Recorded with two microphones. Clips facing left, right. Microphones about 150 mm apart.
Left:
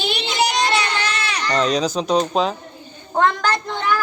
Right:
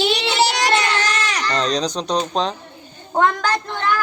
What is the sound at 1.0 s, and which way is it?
Baby cry, 45° right (ahead or behind).